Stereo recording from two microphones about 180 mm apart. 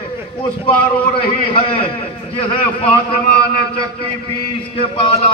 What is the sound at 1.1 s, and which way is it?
A man's voice, 30° left (ahead or behind).